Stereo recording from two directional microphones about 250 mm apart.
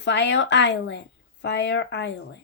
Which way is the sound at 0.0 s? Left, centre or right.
Left.